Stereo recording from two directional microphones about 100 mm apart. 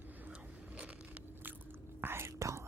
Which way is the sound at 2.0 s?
25° right (ahead or behind).